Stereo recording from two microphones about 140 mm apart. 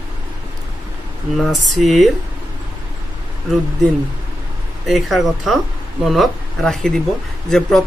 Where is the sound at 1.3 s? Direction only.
Centre (ahead or behind).